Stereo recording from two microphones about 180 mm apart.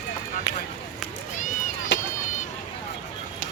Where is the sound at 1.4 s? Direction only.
45° left (ahead or behind).